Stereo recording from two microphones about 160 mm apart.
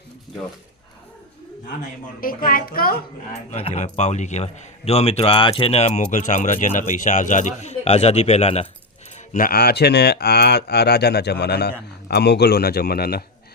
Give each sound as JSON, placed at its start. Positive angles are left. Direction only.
{"t": 2.2, "sound": "a child's voice", "side_deg": 60}
{"t": 3.5, "sound": "speech", "side_deg": 40}
{"t": 9.3, "sound": "speech", "side_deg": 65}